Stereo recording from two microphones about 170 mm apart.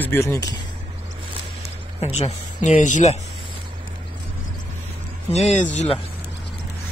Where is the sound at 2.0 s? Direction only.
40° left (ahead or behind).